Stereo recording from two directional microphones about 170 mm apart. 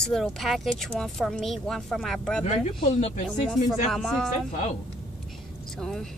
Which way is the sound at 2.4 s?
40° left (ahead or behind).